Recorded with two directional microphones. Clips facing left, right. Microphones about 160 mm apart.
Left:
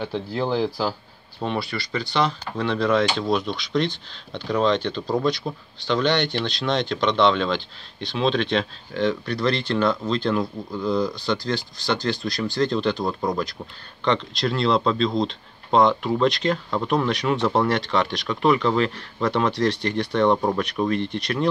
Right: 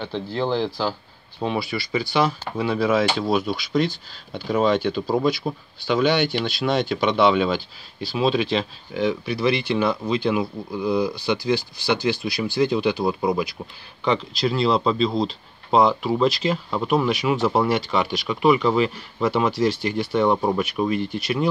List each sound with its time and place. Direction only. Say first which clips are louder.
0.0 s speech: even; 10° left (ahead or behind)
1.4 s speech: right 2 dB; 5° right (ahead or behind)